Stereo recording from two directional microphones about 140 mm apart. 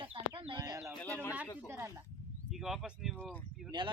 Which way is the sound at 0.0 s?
40° right (ahead or behind).